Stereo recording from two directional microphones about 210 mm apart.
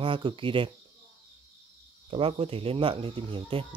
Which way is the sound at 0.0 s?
25° right (ahead or behind).